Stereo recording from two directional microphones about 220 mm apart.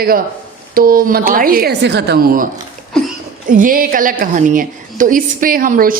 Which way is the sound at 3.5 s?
40° right (ahead or behind).